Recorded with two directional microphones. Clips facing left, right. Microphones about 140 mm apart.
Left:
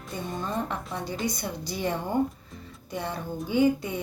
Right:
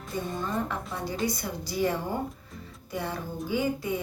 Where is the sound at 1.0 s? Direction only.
20° left (ahead or behind).